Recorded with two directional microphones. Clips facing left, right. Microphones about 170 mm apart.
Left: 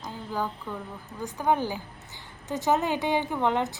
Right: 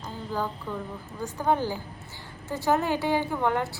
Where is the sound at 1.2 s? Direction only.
15° left (ahead or behind).